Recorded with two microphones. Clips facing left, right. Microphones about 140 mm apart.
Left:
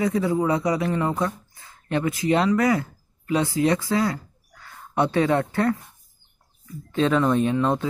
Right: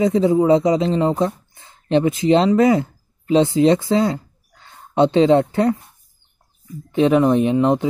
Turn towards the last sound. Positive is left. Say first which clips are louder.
# right 5 dB
turn(degrees=-20)  # may be behind; listen again after turning